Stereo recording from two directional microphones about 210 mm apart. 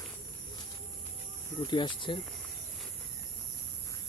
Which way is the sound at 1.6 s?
20° left (ahead or behind).